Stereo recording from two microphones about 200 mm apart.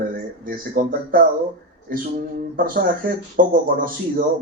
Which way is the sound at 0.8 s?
45° right (ahead or behind).